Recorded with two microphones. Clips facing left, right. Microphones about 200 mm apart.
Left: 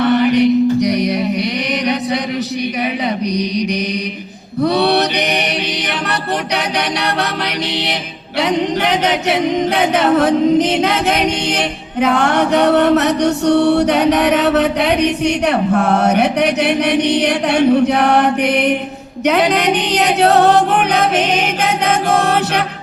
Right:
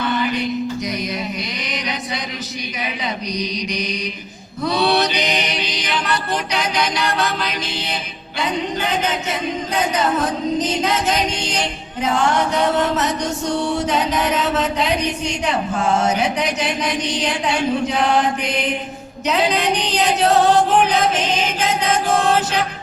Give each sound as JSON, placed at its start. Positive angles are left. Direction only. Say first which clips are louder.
{"t": 0.0, "sound": "music", "louder": "left 9 dB", "side_deg": 70}
{"t": 3.3, "sound": "a capella", "louder": "left 7 dB", "side_deg": 65}
{"t": 4.6, "sound": "mantra", "louder": "left 4 dB", "side_deg": 65}
{"t": 8.4, "sound": "a capella", "louder": "left 6 dB", "side_deg": 75}